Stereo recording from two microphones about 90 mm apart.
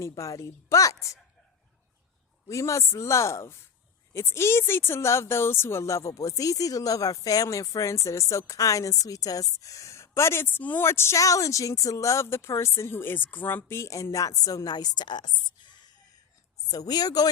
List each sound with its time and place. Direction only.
0.2 s speech: 35° left (ahead or behind)
2.5 s speech: 35° left (ahead or behind)